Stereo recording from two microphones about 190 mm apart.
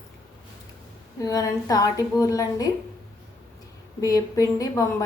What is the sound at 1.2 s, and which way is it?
A woman's voice, 20° left (ahead or behind).